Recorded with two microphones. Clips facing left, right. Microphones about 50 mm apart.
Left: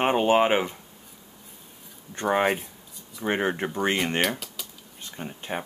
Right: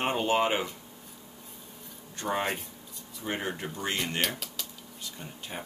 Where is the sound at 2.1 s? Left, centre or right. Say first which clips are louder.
Left 7 dB; left.